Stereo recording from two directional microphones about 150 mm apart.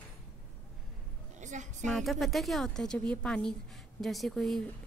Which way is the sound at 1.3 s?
55° right (ahead or behind).